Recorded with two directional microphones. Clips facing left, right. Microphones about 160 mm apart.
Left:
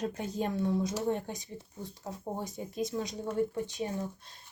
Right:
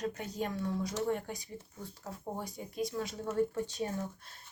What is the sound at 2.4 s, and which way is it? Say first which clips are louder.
Speech: left 2 dB; 20° left (ahead or behind).